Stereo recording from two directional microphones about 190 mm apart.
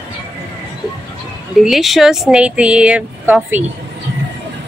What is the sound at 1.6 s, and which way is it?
Speech, centre (ahead or behind).